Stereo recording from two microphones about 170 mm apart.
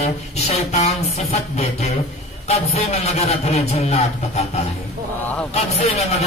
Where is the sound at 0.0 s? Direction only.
40° left (ahead or behind).